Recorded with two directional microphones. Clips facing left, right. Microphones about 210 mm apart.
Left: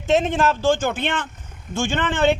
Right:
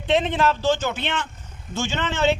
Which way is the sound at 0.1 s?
45° left (ahead or behind).